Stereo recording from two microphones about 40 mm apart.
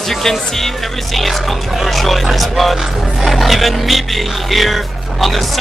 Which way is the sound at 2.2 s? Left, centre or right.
Centre.